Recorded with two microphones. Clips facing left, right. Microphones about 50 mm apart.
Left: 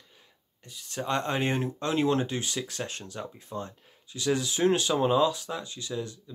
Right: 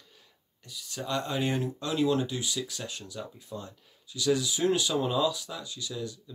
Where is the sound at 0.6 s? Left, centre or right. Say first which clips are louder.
Left 3 dB; left.